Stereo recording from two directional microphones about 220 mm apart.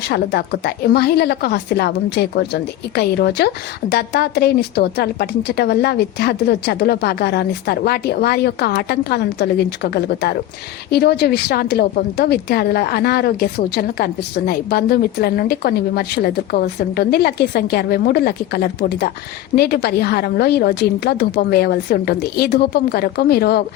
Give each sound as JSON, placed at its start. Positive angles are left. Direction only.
{"t": 0.1, "sound": "a woman's voice", "side_deg": 50}